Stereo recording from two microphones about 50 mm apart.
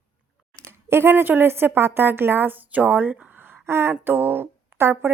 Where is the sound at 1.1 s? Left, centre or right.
Right.